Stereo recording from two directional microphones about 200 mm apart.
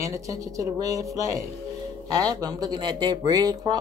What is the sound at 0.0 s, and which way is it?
Speech, 15° right (ahead or behind).